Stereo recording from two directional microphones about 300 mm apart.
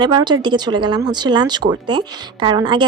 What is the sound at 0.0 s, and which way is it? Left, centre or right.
A woman's voice, centre.